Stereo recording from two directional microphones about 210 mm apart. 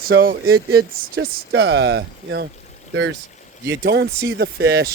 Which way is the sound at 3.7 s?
55° right (ahead or behind).